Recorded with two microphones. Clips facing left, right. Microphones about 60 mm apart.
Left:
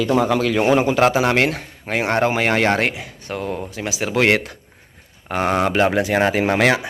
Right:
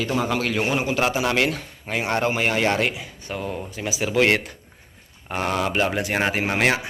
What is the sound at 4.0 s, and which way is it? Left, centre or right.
Speech, left.